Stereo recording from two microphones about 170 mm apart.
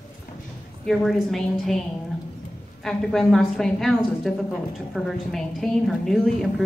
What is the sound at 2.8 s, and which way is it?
A woman's voice, centre (ahead or behind).